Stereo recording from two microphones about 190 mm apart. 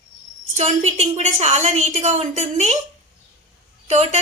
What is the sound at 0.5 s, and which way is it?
Speech, 40° right (ahead or behind).